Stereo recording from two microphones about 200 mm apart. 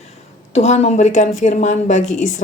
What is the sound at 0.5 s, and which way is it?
Speech, 35° left (ahead or behind).